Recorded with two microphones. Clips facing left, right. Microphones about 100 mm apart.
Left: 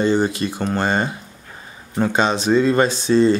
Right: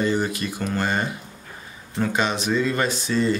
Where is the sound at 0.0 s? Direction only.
30° left (ahead or behind).